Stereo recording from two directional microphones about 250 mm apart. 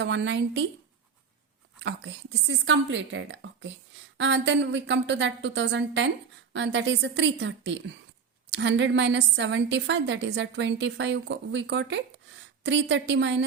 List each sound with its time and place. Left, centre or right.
0.0 s a woman's voice: right
1.8 s a woman's voice: right